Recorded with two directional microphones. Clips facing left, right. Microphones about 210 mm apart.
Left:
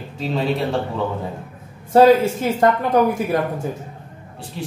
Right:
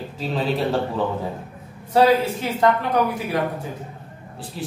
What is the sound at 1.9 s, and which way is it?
Speech, 50° left (ahead or behind).